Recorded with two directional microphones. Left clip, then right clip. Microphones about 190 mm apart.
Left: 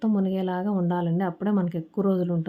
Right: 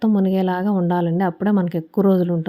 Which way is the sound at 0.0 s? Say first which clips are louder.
Right 7 dB; 30° right (ahead or behind).